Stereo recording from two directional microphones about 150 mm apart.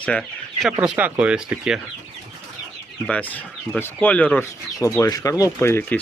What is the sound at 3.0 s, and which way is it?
Speech, 10° left (ahead or behind).